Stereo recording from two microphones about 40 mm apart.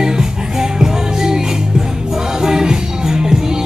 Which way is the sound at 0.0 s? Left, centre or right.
Centre.